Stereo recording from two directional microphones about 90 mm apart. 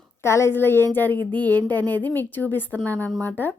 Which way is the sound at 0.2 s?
30° left (ahead or behind).